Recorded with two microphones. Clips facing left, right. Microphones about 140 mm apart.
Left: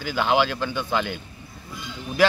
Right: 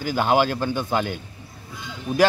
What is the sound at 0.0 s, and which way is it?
Speech, 45° right (ahead or behind).